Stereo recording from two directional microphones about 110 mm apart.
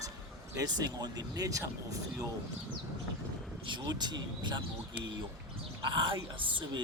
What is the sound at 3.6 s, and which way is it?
Speech, 40° right (ahead or behind).